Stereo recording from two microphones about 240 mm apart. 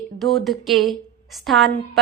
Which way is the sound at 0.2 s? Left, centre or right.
Centre.